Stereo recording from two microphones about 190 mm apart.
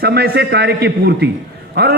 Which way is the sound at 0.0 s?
55° right (ahead or behind).